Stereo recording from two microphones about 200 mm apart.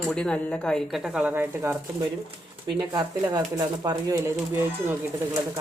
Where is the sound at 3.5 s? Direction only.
20° right (ahead or behind).